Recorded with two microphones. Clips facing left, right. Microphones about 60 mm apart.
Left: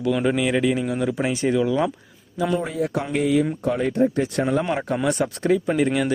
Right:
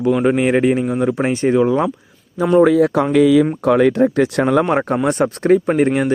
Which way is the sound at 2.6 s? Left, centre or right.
Right.